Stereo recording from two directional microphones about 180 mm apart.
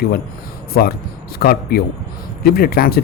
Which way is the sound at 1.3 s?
60° left (ahead or behind).